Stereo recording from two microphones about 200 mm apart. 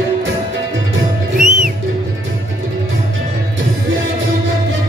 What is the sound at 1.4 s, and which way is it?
Music, 40° right (ahead or behind).